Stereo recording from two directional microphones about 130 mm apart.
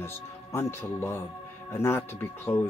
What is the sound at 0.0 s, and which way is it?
Speech, 20° left (ahead or behind).